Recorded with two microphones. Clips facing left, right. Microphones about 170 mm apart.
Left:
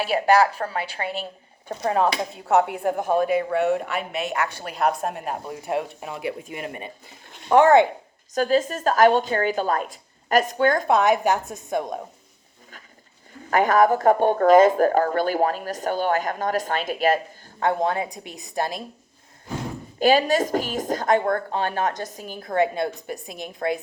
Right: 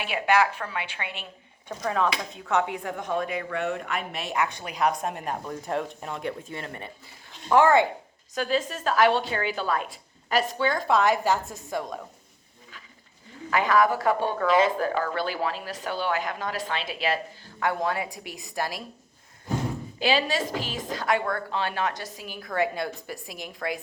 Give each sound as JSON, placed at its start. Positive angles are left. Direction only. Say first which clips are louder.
{"t": 0.0, "sound": "a woman's voice", "louder": "left 5 dB", "side_deg": 35}
{"t": 3.2, "sound": "a woman's voice", "louder": "left 8 dB", "side_deg": 5}
{"t": 8.4, "sound": "a woman's voice", "louder": "left 6 dB", "side_deg": 40}
{"t": 10.8, "sound": "a woman's voice", "louder": "left 3 dB", "side_deg": 20}
{"t": 13.5, "sound": "a woman's voice", "louder": "left 4 dB", "side_deg": 50}
{"t": 17.6, "sound": "a woman's voice", "louder": "left 4 dB", "side_deg": 25}
{"t": 20.0, "sound": "a woman's voice", "louder": "left 7 dB", "side_deg": 45}
{"t": 22.4, "sound": "a woman's voice", "louder": "left 5 dB", "side_deg": 25}